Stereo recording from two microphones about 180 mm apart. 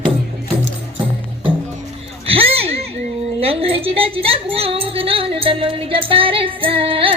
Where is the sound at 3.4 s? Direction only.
30° right (ahead or behind).